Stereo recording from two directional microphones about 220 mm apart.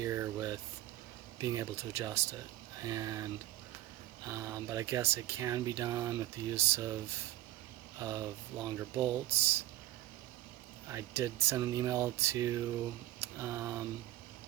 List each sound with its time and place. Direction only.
0.0 s a sound: 15° right (ahead or behind)
1.4 s speech: 15° right (ahead or behind)
4.3 s speech: 15° right (ahead or behind)
7.9 s speech: 15° right (ahead or behind)
10.8 s speech: 10° right (ahead or behind)